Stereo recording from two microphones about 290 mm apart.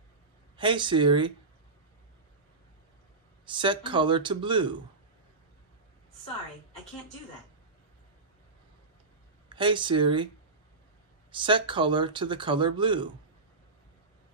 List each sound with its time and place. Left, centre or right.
0.6 s speech: centre
3.4 s speech: centre
9.5 s speech: centre
11.3 s speech: centre